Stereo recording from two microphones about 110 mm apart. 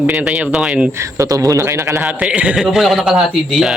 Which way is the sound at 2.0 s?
10° right (ahead or behind).